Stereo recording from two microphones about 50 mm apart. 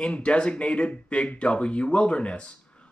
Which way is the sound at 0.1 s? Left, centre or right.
Left.